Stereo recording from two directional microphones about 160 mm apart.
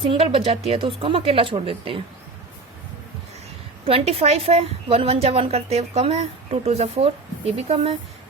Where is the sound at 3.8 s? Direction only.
35° right (ahead or behind).